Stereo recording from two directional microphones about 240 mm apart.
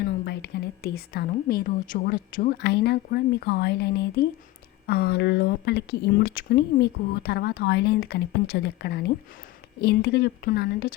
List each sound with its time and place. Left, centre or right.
0.0 s a woman's voice: left